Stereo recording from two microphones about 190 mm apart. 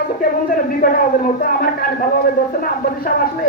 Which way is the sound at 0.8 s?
50° left (ahead or behind).